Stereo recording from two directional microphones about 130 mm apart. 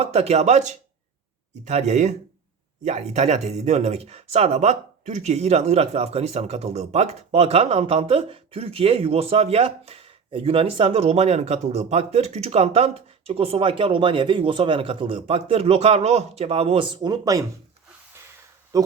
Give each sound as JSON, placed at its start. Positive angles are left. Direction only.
{"t": 0.0, "sound": "speech", "side_deg": -55}
{"t": 18.7, "sound": "insect", "side_deg": -30}